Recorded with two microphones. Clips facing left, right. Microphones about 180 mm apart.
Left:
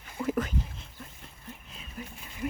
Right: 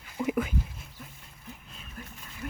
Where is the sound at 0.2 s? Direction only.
10° right (ahead or behind).